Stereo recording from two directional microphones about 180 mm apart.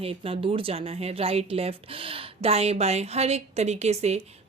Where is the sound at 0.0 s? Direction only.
30° right (ahead or behind).